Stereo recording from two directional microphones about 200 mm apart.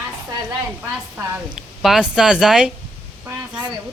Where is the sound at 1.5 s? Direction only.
Centre (ahead or behind).